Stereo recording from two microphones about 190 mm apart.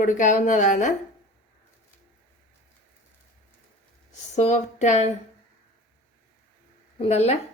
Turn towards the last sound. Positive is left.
turn(degrees=35)  # may be behind; listen again after turning